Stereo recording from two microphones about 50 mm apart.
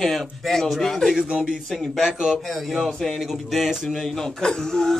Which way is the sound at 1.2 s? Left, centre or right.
Right.